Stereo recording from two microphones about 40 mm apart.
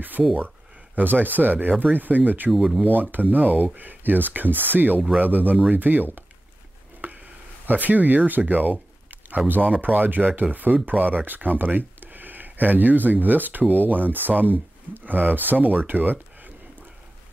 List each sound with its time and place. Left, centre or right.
0.9 s speech: right
2.5 s speech: centre
2.9 s speech: right
7.0 s a sound: right
7.6 s speech: right